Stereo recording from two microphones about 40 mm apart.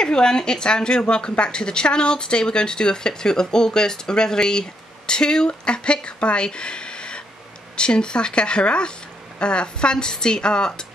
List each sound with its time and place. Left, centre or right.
0.0 s a woman's voice: centre